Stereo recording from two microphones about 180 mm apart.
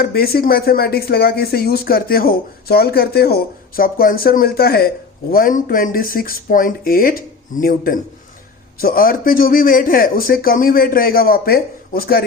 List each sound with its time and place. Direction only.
0.0 s a man's voice: 60° left (ahead or behind)